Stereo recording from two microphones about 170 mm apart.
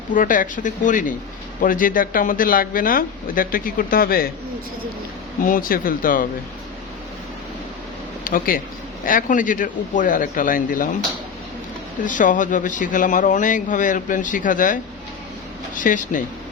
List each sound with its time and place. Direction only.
0.1 s speech: 50° left (ahead or behind)
5.4 s speech: 55° left (ahead or behind)
8.2 s speech: 55° left (ahead or behind)
12.0 s speech: 50° left (ahead or behind)